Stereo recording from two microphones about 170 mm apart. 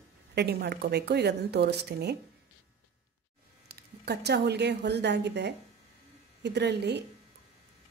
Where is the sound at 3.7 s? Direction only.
75° right (ahead or behind).